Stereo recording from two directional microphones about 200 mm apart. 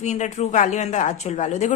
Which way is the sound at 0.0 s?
35° left (ahead or behind).